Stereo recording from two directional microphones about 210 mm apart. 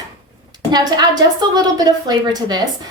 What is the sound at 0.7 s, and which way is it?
A woman's voice, 20° right (ahead or behind).